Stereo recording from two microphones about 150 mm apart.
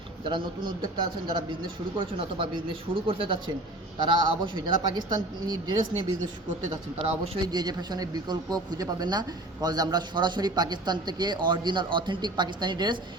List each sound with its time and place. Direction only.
0.9 s a man's voice: 30° right (ahead or behind)
7.0 s a man's voice: 25° right (ahead or behind)